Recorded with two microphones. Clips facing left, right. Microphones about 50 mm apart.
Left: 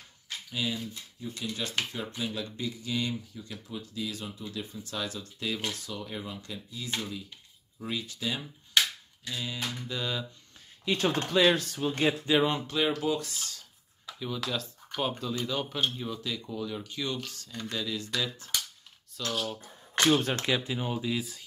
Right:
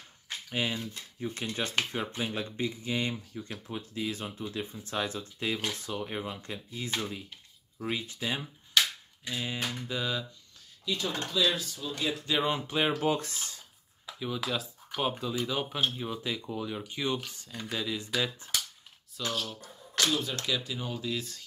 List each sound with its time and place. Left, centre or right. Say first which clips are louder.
0.5 s speech: right 1 dB; right
9.8 s a sound: even; centre
10.9 s speech: left 5 dB; left
12.4 s a sound: left 1 dB; centre
12.6 s speech: even; right
13.0 s speech: right 1 dB; right
14.0 s speech: right 1 dB; centre
16.1 s speech: right 1 dB; right
17.5 s speech: right 1 dB; centre
19.2 s a sound: even; centre
20.1 s speech: left 10 dB; left
20.3 s speech: left 3 dB; left; by 21.5 s centre